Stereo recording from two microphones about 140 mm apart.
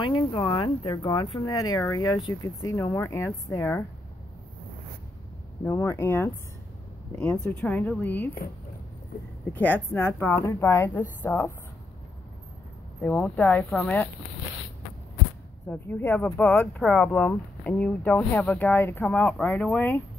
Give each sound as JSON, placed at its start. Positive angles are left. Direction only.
{"t": 0.0, "sound": "speech", "side_deg": 35}
{"t": 1.6, "sound": "speech", "side_deg": 25}
{"t": 5.7, "sound": "speech", "side_deg": 20}
{"t": 7.5, "sound": "speech", "side_deg": 10}
{"t": 9.5, "sound": "speech", "side_deg": 15}
{"t": 13.0, "sound": "speech", "side_deg": 10}
{"t": 15.7, "sound": "speech", "side_deg": 15}
{"t": 19.0, "sound": "speech", "side_deg": 5}